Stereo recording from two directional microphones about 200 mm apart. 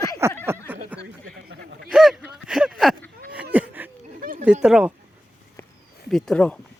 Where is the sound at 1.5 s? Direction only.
50° right (ahead or behind).